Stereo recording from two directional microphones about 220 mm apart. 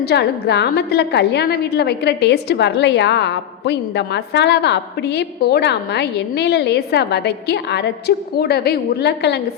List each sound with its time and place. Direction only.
0.0 s a woman's voice: 50° left (ahead or behind)